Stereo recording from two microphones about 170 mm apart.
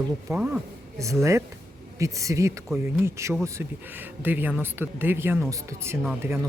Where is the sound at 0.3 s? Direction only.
5° right (ahead or behind).